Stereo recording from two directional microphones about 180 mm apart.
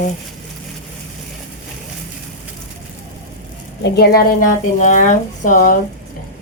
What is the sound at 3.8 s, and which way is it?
A woman's voice, 60° left (ahead or behind).